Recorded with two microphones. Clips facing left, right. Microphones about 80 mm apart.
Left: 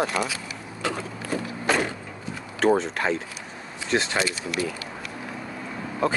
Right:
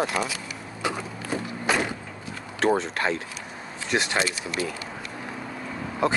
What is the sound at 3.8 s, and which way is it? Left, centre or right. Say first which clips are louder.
Speech: left 1 dB; centre.